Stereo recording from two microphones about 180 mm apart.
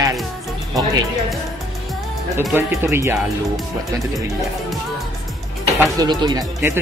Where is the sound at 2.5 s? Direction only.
15° right (ahead or behind).